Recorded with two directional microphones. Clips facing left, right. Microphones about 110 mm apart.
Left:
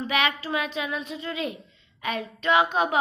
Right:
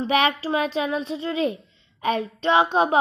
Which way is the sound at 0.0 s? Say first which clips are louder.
Right 5 dB; 30° right (ahead or behind).